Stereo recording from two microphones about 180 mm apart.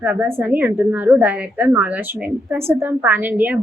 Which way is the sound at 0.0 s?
10° right (ahead or behind).